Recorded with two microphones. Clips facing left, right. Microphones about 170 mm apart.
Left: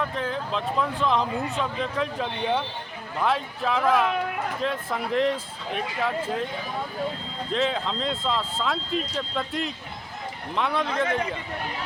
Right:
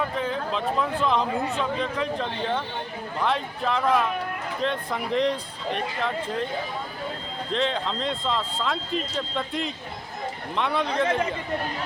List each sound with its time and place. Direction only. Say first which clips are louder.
0.0 s speech: right 1 dB; centre (ahead or behind)
7.5 s speech: even; centre (ahead or behind)